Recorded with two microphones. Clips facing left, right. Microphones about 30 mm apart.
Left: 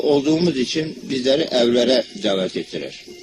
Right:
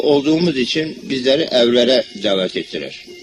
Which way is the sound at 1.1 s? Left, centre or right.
Right.